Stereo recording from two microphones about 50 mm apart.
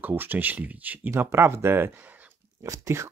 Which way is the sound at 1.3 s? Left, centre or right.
Right.